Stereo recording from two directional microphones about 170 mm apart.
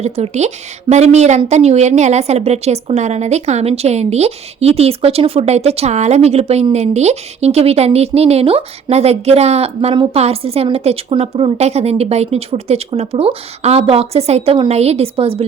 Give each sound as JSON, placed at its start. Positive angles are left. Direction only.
{"t": 0.0, "sound": "speech", "side_deg": -40}